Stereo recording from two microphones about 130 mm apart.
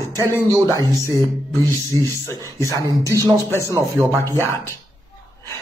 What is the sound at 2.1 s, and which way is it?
Speech, 20° left (ahead or behind).